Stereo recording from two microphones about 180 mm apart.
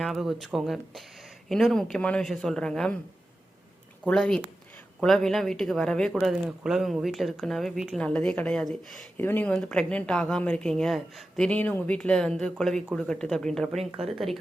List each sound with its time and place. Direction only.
0.0 s speech: centre (ahead or behind)
4.0 s speech: 5° left (ahead or behind)